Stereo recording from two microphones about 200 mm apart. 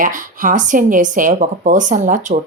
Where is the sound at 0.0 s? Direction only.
40° right (ahead or behind).